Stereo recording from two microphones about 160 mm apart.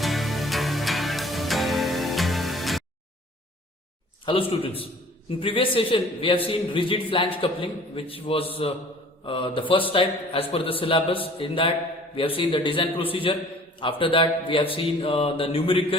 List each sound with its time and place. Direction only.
0.0 s music: centre (ahead or behind)
4.3 s speech: 35° left (ahead or behind)